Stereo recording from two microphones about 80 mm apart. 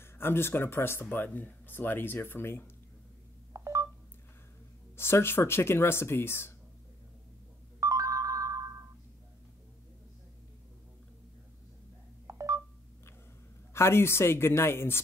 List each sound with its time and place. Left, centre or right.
0.0 s speech: left
3.5 s telephone dialing: right
4.9 s speech: left
7.8 s ringtone: right
12.3 s telephone dialing: right
13.7 s speech: left